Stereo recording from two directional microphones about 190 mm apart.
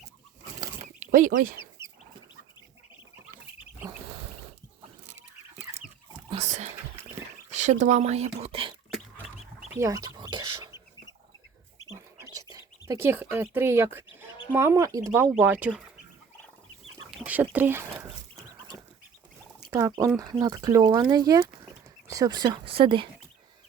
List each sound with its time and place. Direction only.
0.9 s speech: 45° right (ahead or behind)
6.3 s whispering: 35° right (ahead or behind)
7.5 s speech: 40° right (ahead or behind)
9.7 s bird: 15° right (ahead or behind)
12.1 s bird: 15° right (ahead or behind)
14.5 s speech: 15° right (ahead or behind)
17.1 s a sound: 5° right (ahead or behind)
20.4 s speech: 20° right (ahead or behind)